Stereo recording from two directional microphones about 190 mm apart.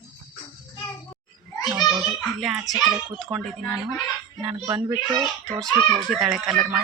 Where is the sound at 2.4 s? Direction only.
Centre (ahead or behind).